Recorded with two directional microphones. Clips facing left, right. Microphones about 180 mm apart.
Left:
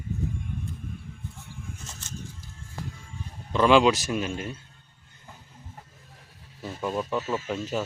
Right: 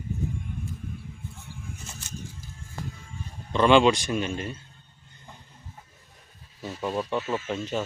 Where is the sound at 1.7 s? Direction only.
10° right (ahead or behind).